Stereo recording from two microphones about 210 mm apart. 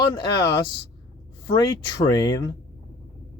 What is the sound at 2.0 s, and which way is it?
Speech, 15° left (ahead or behind).